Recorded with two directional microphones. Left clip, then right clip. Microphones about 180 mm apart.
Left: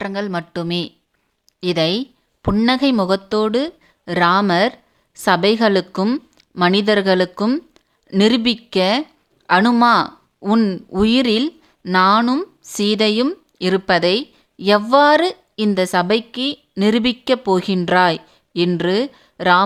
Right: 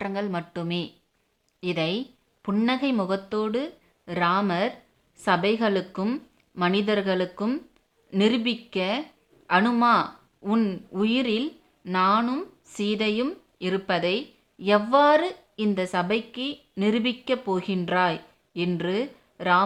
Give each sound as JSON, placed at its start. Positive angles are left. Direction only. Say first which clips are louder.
{"t": 0.0, "sound": "a woman's voice", "louder": "left 6 dB", "side_deg": 25}